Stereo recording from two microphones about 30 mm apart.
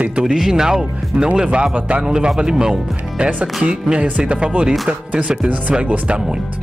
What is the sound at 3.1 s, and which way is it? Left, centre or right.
Music, right.